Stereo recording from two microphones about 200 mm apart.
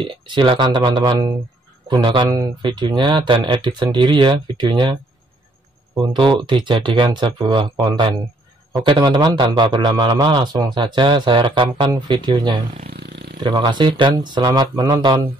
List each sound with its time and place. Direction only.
0.0 s a man's voice: 25° right (ahead or behind)
5.9 s a man's voice: 25° right (ahead or behind)
12.8 s a sound: 55° right (ahead or behind)
13.4 s a man's voice: 25° right (ahead or behind)